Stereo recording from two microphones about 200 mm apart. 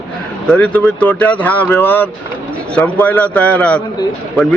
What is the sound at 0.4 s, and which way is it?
A man's voice, 5° left (ahead or behind).